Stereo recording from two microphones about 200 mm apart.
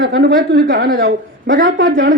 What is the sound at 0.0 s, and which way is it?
A woman's voice, 50° right (ahead or behind).